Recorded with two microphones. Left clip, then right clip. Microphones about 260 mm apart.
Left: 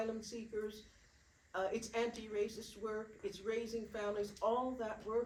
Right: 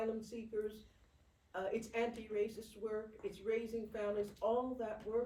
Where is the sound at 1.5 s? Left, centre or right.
Centre.